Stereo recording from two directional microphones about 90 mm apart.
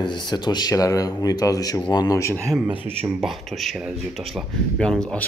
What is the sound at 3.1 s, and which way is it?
Speech, centre (ahead or behind).